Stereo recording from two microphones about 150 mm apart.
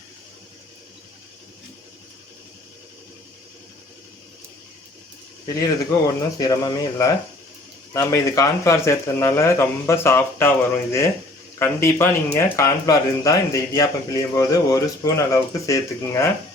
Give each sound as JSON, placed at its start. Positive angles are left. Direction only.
{"t": 5.5, "sound": "speech", "side_deg": 20}
{"t": 11.6, "sound": "speech", "side_deg": 15}